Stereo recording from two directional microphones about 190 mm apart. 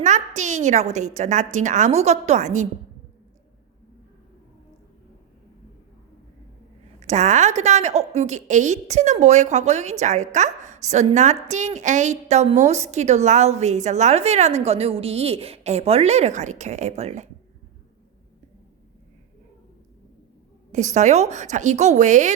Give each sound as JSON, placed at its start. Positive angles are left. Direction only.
{"t": 0.0, "sound": "a woman's voice", "side_deg": -40}
{"t": 7.0, "sound": "a woman's voice", "side_deg": -35}
{"t": 20.7, "sound": "a woman's voice", "side_deg": -40}